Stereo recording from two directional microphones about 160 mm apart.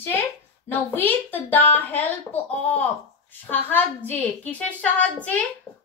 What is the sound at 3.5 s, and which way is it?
A woman's voice, 10° left (ahead or behind).